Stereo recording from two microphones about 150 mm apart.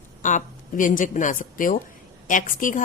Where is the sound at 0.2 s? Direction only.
55° left (ahead or behind).